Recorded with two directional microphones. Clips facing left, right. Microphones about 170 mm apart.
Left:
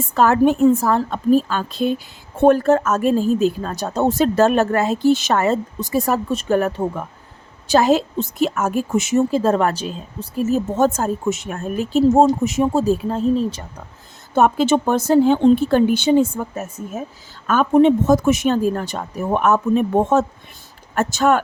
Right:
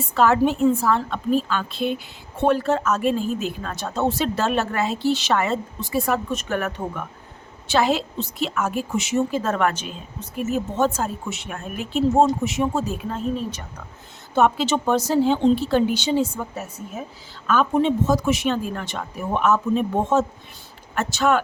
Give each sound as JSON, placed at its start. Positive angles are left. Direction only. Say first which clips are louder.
{"t": 0.1, "sound": "speech", "louder": "left 3 dB", "side_deg": 45}
{"t": 7.7, "sound": "speech", "louder": "left 5 dB", "side_deg": 45}
{"t": 9.3, "sound": "speech", "louder": "left 5 dB", "side_deg": 30}
{"t": 14.3, "sound": "speech", "louder": "left 4 dB", "side_deg": 45}
{"t": 20.9, "sound": "speech", "louder": "left 3 dB", "side_deg": 45}